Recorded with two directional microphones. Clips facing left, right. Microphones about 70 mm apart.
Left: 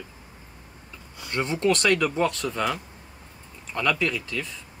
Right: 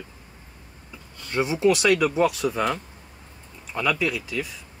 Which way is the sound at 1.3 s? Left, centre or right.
Centre.